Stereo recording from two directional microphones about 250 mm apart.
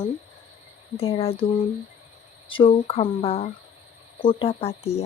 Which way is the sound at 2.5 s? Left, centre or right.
Left.